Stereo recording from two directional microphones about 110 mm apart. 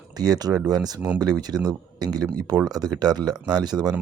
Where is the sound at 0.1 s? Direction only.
35° right (ahead or behind).